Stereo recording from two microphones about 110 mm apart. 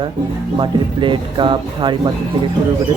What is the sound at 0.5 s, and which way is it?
Speech, 50° right (ahead or behind).